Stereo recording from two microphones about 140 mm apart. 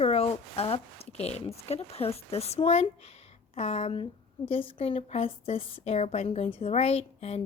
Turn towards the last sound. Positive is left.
turn(degrees=45)  # may be behind; listen again after turning